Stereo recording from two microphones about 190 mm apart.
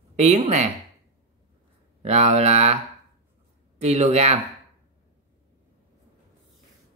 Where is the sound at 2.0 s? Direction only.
35° right (ahead or behind).